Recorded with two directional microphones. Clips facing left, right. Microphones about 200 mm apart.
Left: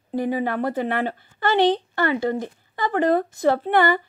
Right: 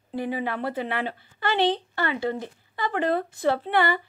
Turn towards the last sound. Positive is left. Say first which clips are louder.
# left 4 dB
turn(degrees=45)  # may be behind; listen again after turning